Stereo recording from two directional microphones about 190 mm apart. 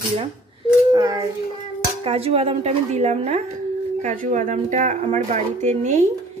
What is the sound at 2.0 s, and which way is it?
Speech, 30° right (ahead or behind).